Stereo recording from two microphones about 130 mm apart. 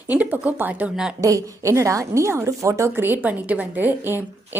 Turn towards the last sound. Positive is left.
turn(degrees=-15)  # may be behind; listen again after turning